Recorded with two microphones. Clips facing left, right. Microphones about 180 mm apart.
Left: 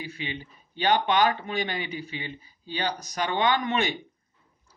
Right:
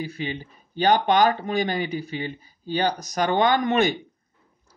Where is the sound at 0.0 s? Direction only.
40° right (ahead or behind).